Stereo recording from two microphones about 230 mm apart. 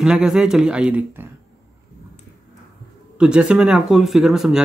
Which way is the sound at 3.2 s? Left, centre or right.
Centre.